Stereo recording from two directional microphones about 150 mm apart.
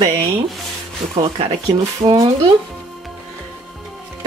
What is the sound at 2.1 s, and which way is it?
Speech, 30° right (ahead or behind).